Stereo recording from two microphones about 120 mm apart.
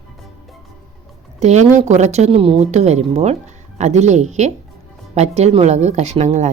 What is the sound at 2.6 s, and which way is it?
Speech, 65° right (ahead or behind).